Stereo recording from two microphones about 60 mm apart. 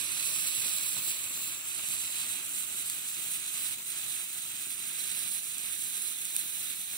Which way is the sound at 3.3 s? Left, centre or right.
Centre.